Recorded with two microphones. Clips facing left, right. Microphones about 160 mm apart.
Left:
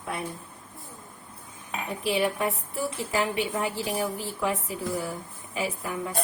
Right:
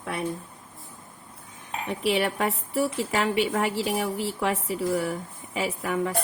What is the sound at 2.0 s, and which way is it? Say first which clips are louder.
A woman's voice: right 1 dB; 75° right (ahead or behind).